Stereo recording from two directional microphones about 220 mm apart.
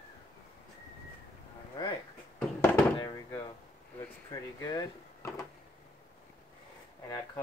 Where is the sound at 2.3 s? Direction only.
5° left (ahead or behind).